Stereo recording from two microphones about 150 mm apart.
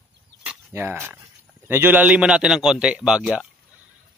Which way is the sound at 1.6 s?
15° right (ahead or behind).